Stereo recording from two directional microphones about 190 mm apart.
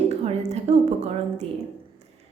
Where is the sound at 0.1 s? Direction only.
35° right (ahead or behind).